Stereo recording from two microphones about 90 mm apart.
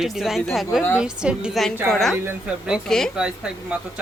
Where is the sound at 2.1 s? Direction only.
20° right (ahead or behind).